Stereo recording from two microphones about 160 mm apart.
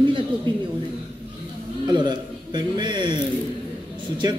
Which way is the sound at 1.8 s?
25° right (ahead or behind).